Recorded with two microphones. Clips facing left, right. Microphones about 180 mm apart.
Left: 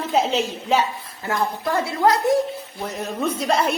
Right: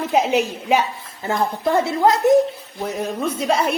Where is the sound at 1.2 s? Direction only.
25° right (ahead or behind).